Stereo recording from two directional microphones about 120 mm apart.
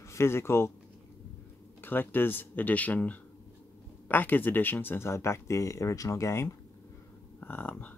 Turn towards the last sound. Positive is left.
turn(degrees=15)  # may be behind; listen again after turning